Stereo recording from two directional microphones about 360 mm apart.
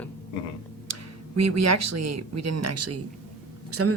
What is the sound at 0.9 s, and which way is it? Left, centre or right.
Speech, right.